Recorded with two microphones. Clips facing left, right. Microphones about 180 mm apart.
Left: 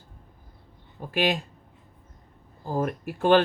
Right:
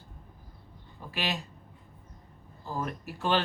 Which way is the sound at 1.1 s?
50° left (ahead or behind).